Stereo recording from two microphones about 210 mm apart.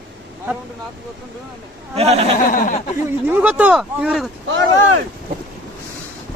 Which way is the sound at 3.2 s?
5° right (ahead or behind).